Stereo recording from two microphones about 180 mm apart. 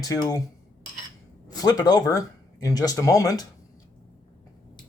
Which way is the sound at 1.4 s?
20° left (ahead or behind).